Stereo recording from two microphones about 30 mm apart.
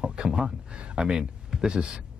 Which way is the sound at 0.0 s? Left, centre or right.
Right.